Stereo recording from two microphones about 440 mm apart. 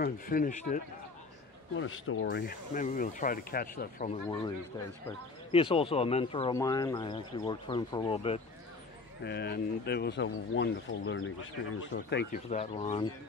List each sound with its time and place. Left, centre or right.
0.0 s speech: centre
5.5 s speech: centre
9.2 s speech: left